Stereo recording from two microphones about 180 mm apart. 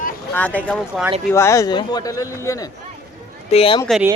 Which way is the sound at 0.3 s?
10° left (ahead or behind).